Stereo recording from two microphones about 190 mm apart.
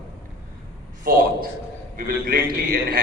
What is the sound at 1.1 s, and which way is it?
A man's voice, 50° right (ahead or behind).